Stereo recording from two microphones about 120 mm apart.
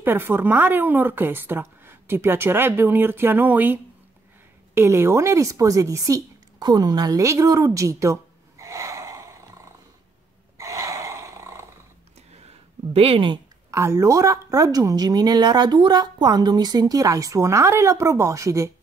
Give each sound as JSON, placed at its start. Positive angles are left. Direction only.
{"t": 0.0, "sound": "a woman's voice", "side_deg": -15}
{"t": 10.6, "sound": "a sound", "side_deg": -30}
{"t": 12.9, "sound": "speech", "side_deg": -50}
{"t": 13.7, "sound": "a woman's voice", "side_deg": -25}